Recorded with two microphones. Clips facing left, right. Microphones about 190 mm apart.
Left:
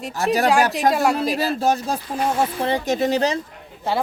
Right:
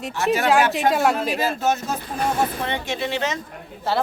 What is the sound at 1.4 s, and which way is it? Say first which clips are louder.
Speech: left 2 dB; 35° left (ahead or behind).